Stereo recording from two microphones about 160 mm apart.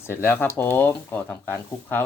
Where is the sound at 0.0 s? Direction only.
15° left (ahead or behind).